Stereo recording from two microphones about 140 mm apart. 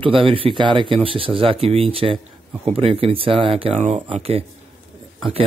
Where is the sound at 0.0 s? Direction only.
40° right (ahead or behind).